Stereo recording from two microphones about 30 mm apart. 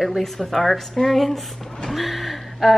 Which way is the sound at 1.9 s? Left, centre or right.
Centre.